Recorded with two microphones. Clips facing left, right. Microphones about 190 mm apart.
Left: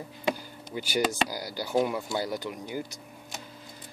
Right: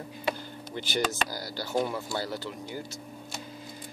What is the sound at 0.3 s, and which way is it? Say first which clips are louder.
Speech: left 2 dB; 10° left (ahead or behind).